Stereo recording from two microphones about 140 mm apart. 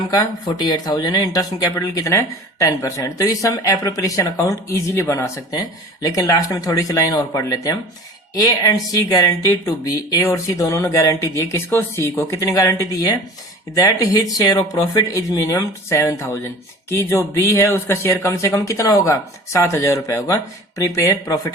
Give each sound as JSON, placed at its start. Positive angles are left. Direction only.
{"t": 0.1, "sound": "speech", "side_deg": 25}